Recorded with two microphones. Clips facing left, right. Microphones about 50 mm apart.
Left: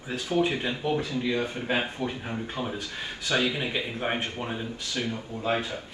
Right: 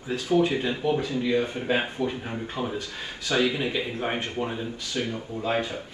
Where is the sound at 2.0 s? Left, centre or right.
Centre.